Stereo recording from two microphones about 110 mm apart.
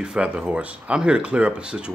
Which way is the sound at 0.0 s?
10° right (ahead or behind).